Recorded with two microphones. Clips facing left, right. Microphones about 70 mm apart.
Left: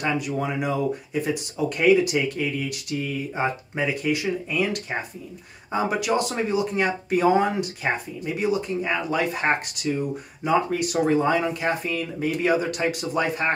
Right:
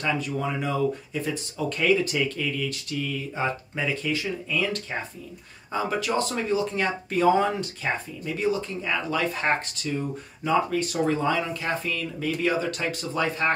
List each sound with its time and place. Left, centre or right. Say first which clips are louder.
0.0 s speech: left 2 dB; centre